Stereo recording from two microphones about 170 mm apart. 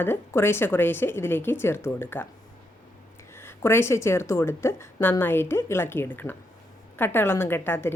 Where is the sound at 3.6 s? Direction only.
15° left (ahead or behind).